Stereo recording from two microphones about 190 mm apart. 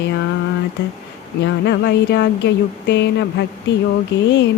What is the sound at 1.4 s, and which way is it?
Speech, 60° left (ahead or behind).